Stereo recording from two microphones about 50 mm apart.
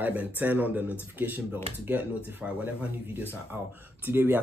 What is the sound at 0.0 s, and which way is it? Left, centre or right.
Speech, right.